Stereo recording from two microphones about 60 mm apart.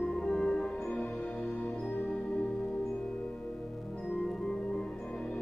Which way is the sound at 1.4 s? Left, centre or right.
Left.